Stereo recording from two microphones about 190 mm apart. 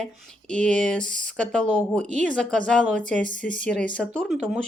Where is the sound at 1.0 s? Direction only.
40° right (ahead or behind).